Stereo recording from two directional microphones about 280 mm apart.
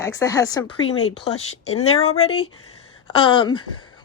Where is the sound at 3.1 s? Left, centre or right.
Centre.